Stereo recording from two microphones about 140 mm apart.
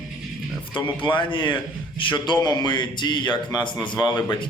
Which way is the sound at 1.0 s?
35° left (ahead or behind).